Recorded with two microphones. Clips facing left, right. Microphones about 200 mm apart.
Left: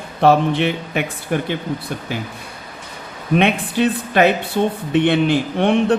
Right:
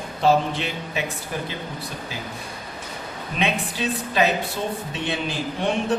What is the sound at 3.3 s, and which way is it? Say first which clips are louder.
Speech: left 9 dB; 60° left (ahead or behind).